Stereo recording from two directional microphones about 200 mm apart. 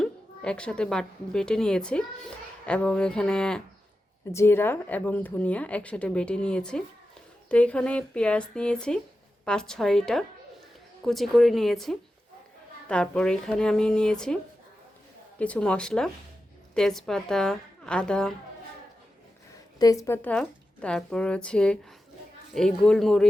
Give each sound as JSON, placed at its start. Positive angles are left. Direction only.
{"t": 0.0, "sound": "a woman's voice", "side_deg": 5}
{"t": 15.4, "sound": "speech", "side_deg": 5}
{"t": 19.8, "sound": "speech", "side_deg": 15}